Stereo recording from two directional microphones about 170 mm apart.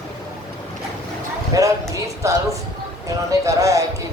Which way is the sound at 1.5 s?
20° right (ahead or behind).